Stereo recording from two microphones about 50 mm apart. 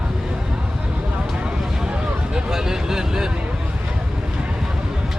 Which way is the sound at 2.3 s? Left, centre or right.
Centre.